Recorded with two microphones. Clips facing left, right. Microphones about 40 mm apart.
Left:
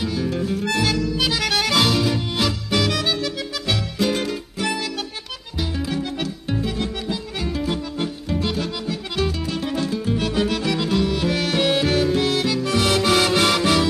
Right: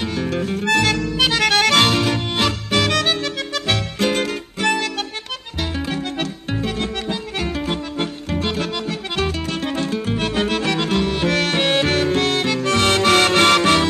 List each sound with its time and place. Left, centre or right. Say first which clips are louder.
0.0 s harmonica: right 1 dB; right
5.8 s music: right 1 dB; right
11.5 s harmonica: right 1 dB; right